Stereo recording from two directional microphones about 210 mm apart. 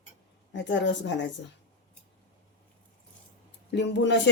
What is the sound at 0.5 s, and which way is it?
Speech, 60° left (ahead or behind).